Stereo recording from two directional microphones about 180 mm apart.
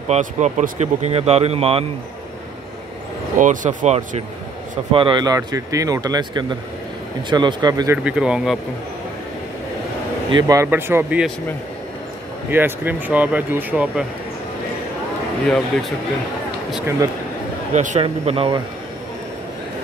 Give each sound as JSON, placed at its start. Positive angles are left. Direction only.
{"t": 0.1, "sound": "speech", "side_deg": -40}
{"t": 3.3, "sound": "speech", "side_deg": -45}
{"t": 4.9, "sound": "speech", "side_deg": -25}
{"t": 8.0, "sound": "speech", "side_deg": -5}
{"t": 10.3, "sound": "speech", "side_deg": -20}
{"t": 12.4, "sound": "speech", "side_deg": -10}
{"t": 15.4, "sound": "speech", "side_deg": 0}
{"t": 17.7, "sound": "speech", "side_deg": -40}